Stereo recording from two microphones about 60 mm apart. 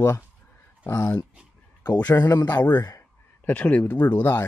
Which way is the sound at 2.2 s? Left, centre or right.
Left.